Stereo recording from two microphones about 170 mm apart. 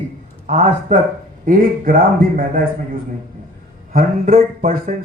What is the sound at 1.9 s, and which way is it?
Music, 60° right (ahead or behind).